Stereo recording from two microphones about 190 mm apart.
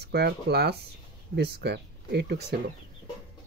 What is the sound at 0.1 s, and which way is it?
Speech, 60° right (ahead or behind).